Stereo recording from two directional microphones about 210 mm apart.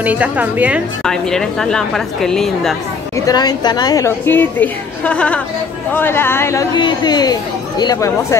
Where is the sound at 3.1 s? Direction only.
15° left (ahead or behind).